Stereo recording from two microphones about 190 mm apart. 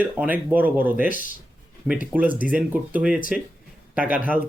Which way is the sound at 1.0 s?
45° left (ahead or behind).